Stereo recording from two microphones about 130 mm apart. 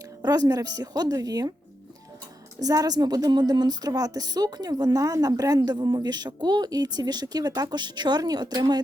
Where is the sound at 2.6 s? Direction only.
30° right (ahead or behind).